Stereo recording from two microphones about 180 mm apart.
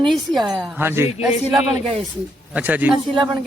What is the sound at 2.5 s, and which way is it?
Speech, 10° right (ahead or behind).